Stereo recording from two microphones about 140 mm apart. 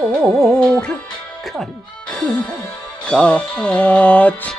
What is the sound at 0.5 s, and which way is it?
Music, 5° left (ahead or behind).